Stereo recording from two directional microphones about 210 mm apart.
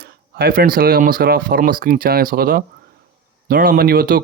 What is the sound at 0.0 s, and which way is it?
Speech, 45° right (ahead or behind).